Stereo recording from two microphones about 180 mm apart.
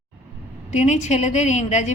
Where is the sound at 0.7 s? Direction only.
40° left (ahead or behind).